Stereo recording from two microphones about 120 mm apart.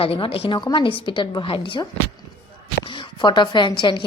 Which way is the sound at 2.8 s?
45° left (ahead or behind).